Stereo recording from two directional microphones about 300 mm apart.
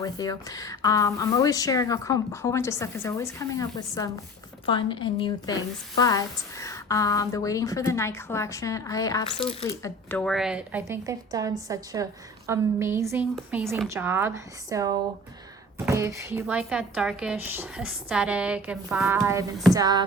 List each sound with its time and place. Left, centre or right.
0.0 s a woman's voice: centre
9.8 s a woman's voice: centre